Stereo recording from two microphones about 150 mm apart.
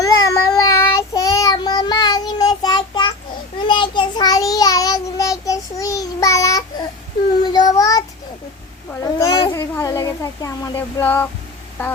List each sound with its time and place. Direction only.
0.0 s child singing: 20° left (ahead or behind)
8.9 s a child's voice: 20° left (ahead or behind)